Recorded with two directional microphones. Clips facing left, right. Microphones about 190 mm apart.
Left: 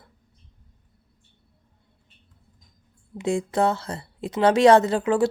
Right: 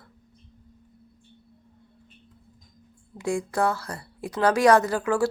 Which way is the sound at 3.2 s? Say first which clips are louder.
Left 3 dB; 25° left (ahead or behind).